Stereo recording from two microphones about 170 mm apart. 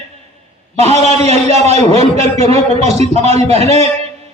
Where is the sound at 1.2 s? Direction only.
40° right (ahead or behind).